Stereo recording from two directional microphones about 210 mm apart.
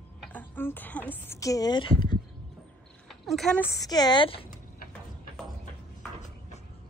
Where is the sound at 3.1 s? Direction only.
Centre (ahead or behind); by 4.5 s 25° left (ahead or behind).